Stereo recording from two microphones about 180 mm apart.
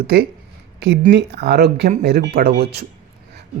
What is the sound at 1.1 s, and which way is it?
Speech, 70° right (ahead or behind).